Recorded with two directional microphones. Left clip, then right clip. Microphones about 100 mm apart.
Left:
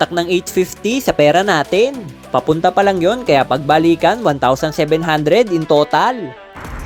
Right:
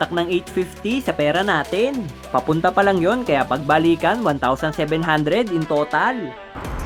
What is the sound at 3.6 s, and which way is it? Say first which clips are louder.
Speech: left 5 dB; 25° left (ahead or behind).